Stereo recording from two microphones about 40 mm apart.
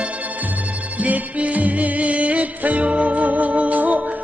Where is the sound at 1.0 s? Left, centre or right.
Right.